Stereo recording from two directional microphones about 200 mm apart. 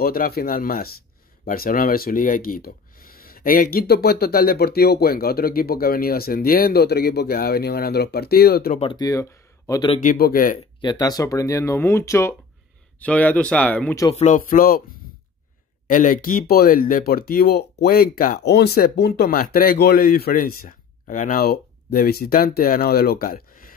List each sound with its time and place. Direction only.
0.0 s speech: 50° left (ahead or behind)
8.7 s speech: 25° left (ahead or behind)
9.9 s speech: 45° left (ahead or behind)
10.8 s speech: 20° left (ahead or behind)
14.1 s speech: 40° left (ahead or behind)
15.9 s speech: 40° left (ahead or behind)